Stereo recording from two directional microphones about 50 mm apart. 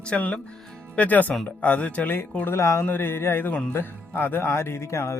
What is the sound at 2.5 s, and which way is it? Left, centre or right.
Speech, left.